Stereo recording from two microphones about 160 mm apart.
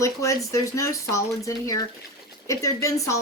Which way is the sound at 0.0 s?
20° left (ahead or behind).